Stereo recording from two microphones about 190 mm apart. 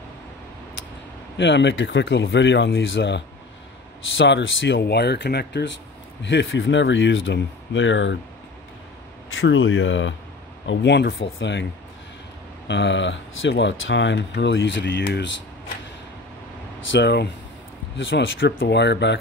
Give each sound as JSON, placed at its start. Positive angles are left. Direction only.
{"t": 1.4, "sound": "speech", "side_deg": 70}
{"t": 4.2, "sound": "speech", "side_deg": 80}
{"t": 6.2, "sound": "speech", "side_deg": 75}
{"t": 9.3, "sound": "speech", "side_deg": 90}
{"t": 10.7, "sound": "speech", "side_deg": 65}
{"t": 12.6, "sound": "speech", "side_deg": 70}
{"t": 16.9, "sound": "speech", "side_deg": 60}
{"t": 17.9, "sound": "speech", "side_deg": 75}